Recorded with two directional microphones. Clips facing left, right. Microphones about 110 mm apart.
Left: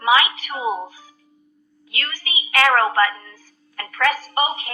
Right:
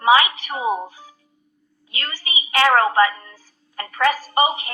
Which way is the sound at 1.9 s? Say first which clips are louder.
Even; 30° right (ahead or behind).